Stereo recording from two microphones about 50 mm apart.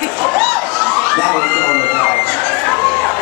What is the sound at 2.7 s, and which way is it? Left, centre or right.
Run, centre.